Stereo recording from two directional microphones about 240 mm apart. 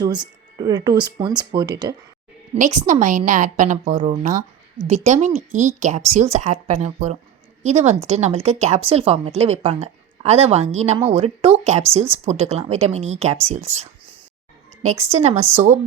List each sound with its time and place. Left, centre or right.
0.0 s speech: centre
2.6 s a woman's voice: right
15.1 s speech: right